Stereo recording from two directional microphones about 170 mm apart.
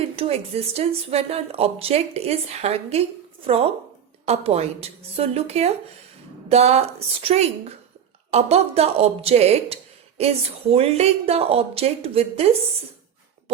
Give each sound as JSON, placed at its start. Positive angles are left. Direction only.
{"t": 0.2, "sound": "a woman's voice", "side_deg": -35}
{"t": 4.3, "sound": "a woman's voice", "side_deg": -35}